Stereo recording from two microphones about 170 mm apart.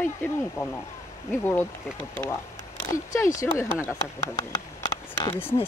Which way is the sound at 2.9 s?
20° left (ahead or behind).